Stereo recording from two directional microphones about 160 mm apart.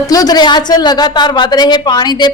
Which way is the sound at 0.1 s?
25° left (ahead or behind).